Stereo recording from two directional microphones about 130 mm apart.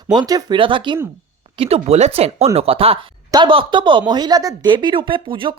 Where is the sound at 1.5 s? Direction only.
50° right (ahead or behind).